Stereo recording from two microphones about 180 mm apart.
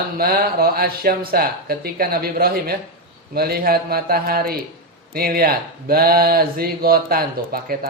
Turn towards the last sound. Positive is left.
turn(degrees=-55)  # may be behind; listen again after turning